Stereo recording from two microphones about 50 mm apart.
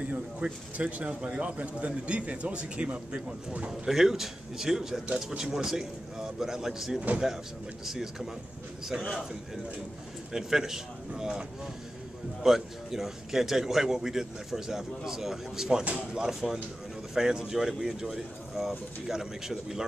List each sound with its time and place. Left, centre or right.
0.0 s speech: right
3.9 s a man's voice: centre
5.0 s speech: right
5.4 s a man's voice: centre
10.3 s a man's voice: centre
12.4 s a man's voice: centre
15.8 s speech: right
16.1 s a man's voice: centre